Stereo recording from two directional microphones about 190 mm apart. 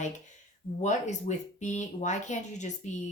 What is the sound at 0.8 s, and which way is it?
A woman's voice, 40° left (ahead or behind).